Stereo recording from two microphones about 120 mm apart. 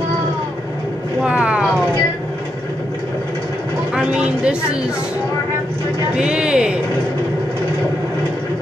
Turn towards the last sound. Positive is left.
turn(degrees=-10)  # may be behind; listen again after turning